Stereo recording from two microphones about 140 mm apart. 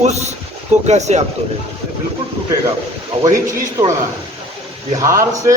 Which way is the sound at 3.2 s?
25° right (ahead or behind).